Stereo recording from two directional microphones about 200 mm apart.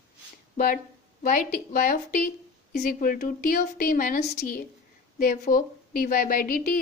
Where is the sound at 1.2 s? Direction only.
45° left (ahead or behind).